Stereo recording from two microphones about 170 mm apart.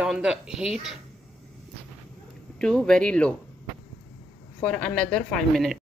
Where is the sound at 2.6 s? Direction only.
5° left (ahead or behind).